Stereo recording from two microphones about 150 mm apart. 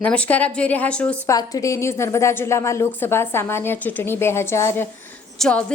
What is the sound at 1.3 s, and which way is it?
A woman's voice, 25° left (ahead or behind).